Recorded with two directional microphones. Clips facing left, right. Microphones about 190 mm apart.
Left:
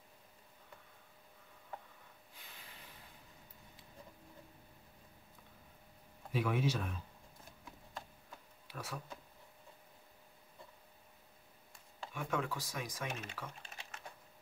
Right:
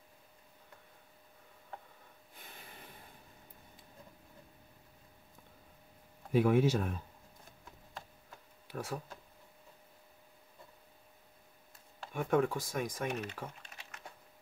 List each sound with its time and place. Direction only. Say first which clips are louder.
2.3 s snort: right 5 dB; 55° right (ahead or behind)
6.3 s speech: right 8 dB; 50° right (ahead or behind)
8.6 s speech: right 6 dB; 50° right (ahead or behind)
12.1 s speech: right 8 dB; 50° right (ahead or behind)
13.6 s typing: left 1 dB; 30° left (ahead or behind)